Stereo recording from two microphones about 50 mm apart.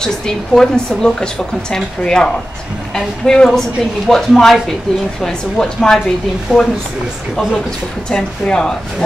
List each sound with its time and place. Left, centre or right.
0.0 s speech: centre
6.5 s speech: centre
8.1 s speech: centre